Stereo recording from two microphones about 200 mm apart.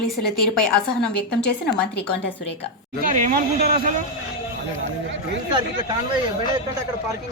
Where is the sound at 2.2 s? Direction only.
60° left (ahead or behind).